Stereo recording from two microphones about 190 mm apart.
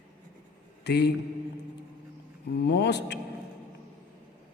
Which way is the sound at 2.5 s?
60° left (ahead or behind).